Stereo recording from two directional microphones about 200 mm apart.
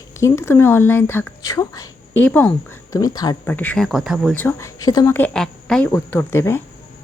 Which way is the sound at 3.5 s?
10° left (ahead or behind).